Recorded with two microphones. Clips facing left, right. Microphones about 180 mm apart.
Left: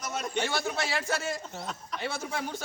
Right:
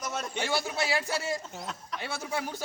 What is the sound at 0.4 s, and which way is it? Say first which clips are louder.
Speech: right 1 dB; 10° right (ahead or behind).